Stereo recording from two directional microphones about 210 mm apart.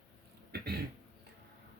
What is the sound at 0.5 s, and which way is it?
Speech, 50° right (ahead or behind).